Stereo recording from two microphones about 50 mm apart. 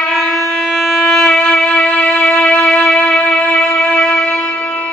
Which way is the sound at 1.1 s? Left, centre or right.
Centre.